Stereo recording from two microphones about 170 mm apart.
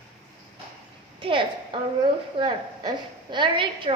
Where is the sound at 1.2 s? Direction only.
30° right (ahead or behind).